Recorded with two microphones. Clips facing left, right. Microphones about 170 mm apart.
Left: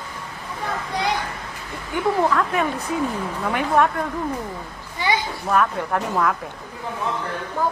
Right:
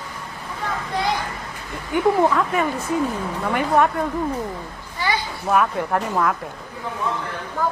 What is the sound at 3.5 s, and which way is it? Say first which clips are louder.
Speech: right 1 dB; centre (ahead or behind).